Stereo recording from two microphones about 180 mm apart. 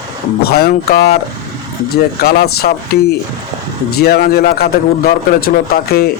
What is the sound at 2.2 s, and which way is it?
Speech, 60° left (ahead or behind).